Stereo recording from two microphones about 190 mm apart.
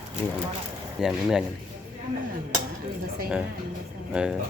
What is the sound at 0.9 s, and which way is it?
Speech, 5° right (ahead or behind).